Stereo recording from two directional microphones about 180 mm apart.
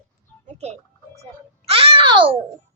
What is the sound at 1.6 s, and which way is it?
Babbling, 30° right (ahead or behind).